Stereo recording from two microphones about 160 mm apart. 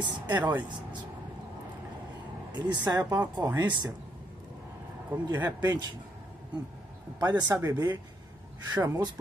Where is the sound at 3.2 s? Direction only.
10° right (ahead or behind).